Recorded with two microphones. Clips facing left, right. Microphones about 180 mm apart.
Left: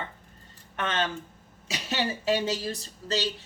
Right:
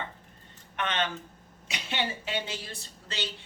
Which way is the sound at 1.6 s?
40° left (ahead or behind).